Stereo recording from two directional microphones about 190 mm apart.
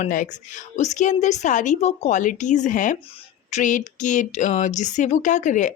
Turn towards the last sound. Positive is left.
turn(degrees=40)  # may be behind; listen again after turning